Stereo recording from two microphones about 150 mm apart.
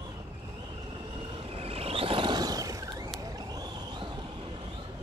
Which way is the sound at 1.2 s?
35° right (ahead or behind).